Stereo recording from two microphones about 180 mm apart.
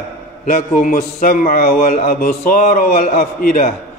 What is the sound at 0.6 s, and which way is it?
A man's voice, 50° left (ahead or behind).